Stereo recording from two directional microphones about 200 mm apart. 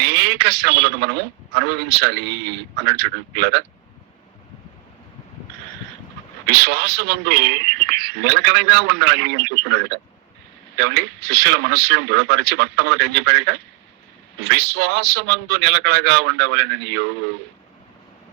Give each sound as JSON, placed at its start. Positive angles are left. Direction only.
{"t": 0.0, "sound": "a man's voice", "side_deg": -55}
{"t": 6.5, "sound": "a man's voice", "side_deg": -55}